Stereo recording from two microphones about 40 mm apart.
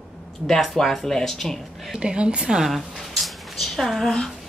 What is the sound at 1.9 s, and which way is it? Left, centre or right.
Speech, right.